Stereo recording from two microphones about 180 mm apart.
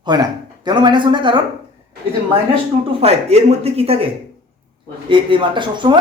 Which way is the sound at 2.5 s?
30° right (ahead or behind).